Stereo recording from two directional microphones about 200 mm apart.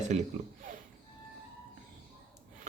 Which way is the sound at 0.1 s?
40° right (ahead or behind).